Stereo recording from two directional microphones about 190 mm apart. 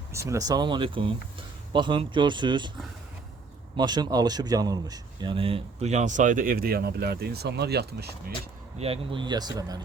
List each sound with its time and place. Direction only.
0.1 s speech: 15° right (ahead or behind)
3.8 s speech: 20° right (ahead or behind); by 8.3 s 55° right (ahead or behind)
8.8 s speech: 30° right (ahead or behind)